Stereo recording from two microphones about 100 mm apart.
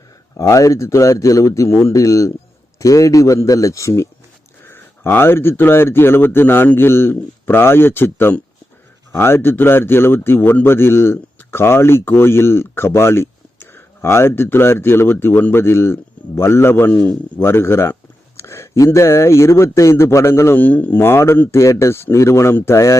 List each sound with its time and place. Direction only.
0.3 s a man's voice: 35° left (ahead or behind)